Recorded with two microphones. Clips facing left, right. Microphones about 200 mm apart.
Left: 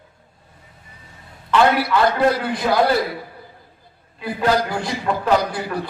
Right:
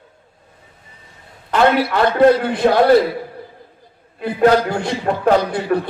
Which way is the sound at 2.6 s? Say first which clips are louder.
Right 6 dB; 45° right (ahead or behind).